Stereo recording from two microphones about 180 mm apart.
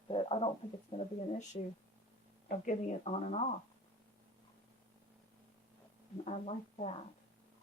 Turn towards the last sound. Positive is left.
turn(degrees=35)  # may be behind; listen again after turning